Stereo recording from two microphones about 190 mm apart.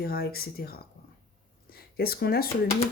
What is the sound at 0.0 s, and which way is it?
Speech, 55° left (ahead or behind).